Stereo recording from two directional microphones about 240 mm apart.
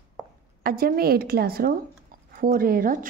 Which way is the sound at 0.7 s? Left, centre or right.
Right.